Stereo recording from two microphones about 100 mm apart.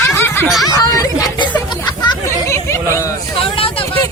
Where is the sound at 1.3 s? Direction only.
50° left (ahead or behind).